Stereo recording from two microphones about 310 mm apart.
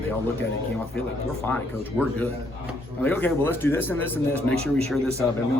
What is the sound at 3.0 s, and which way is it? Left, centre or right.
A man's voice, centre.